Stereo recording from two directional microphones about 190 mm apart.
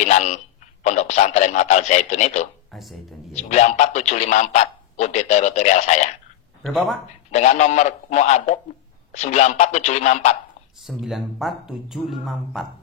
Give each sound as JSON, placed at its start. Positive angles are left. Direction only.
{"t": 0.0, "sound": "telephone", "side_deg": 35}
{"t": 0.8, "sound": "a man's voice", "side_deg": 40}
{"t": 2.7, "sound": "speech", "side_deg": 0}
{"t": 3.3, "sound": "a man's voice", "side_deg": 35}
{"t": 6.6, "sound": "speech", "side_deg": 0}
{"t": 7.2, "sound": "a man's voice", "side_deg": 35}
{"t": 10.8, "sound": "speech", "side_deg": 0}